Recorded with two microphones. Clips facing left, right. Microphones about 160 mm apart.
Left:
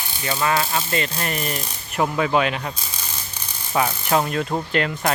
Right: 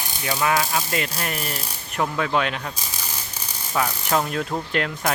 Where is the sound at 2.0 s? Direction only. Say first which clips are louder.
Left 3 dB; 5° left (ahead or behind).